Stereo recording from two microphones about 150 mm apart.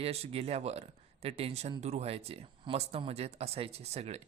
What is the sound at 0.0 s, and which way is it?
Speech, 40° right (ahead or behind).